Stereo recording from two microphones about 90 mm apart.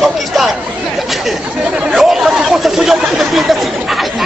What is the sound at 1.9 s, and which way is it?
Speech, 5° right (ahead or behind).